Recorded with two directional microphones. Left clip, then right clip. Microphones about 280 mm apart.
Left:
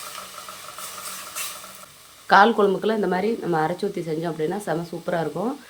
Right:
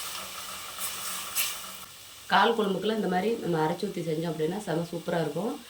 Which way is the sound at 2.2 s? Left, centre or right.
Centre.